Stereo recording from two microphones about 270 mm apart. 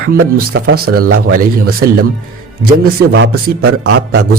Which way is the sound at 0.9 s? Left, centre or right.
Right.